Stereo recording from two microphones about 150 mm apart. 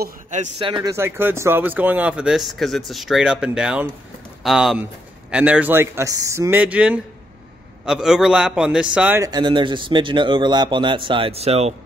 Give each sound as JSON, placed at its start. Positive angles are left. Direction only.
{"t": 0.6, "sound": "a man's voice", "side_deg": -35}
{"t": 0.8, "sound": "a man's voice", "side_deg": -15}
{"t": 9.2, "sound": "a man's voice", "side_deg": -30}